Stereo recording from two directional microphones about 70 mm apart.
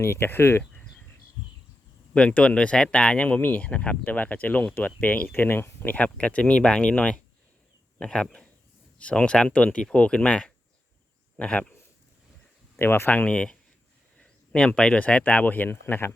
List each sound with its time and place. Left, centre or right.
0.0 s speech: left
2.1 s speech: centre
12.8 s speech: left
13.1 s speech: left
14.7 s speech: centre; by 16.1 s left